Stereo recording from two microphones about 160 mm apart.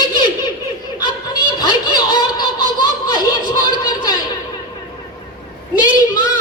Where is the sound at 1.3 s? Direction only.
25° left (ahead or behind).